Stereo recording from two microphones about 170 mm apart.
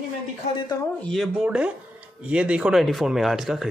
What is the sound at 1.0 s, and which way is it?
Speech, centre (ahead or behind).